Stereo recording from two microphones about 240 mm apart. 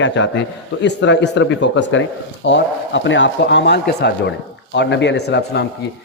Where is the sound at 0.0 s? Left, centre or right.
Left.